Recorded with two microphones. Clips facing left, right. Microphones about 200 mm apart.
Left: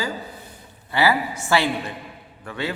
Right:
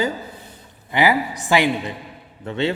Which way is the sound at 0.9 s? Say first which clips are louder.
Right 2 dB; 15° right (ahead or behind).